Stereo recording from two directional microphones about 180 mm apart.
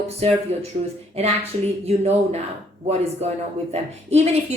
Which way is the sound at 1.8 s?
35° right (ahead or behind).